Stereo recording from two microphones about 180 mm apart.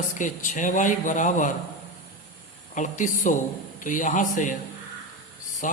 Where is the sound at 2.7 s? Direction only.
45° left (ahead or behind).